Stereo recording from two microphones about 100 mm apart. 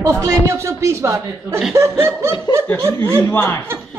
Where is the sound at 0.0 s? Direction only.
30° right (ahead or behind).